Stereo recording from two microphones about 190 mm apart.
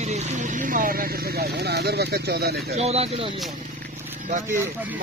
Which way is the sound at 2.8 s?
35° right (ahead or behind).